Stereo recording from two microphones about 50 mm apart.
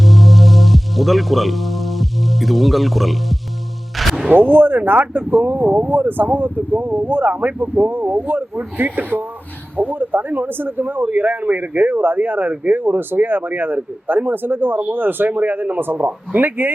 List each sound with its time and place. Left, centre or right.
0.0 s music: centre
4.3 s speech: right